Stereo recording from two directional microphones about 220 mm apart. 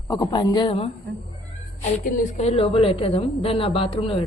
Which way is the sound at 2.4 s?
30° left (ahead or behind).